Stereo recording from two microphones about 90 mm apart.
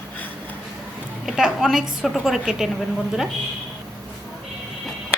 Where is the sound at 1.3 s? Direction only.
5° right (ahead or behind).